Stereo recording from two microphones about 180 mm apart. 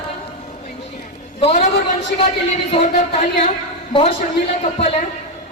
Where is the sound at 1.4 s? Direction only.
40° left (ahead or behind).